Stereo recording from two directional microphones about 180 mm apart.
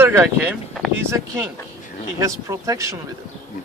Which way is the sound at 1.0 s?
15° right (ahead or behind).